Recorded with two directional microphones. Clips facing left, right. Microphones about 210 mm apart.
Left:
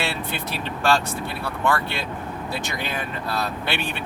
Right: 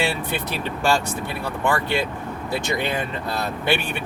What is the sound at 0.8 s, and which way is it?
Speech, 15° right (ahead or behind).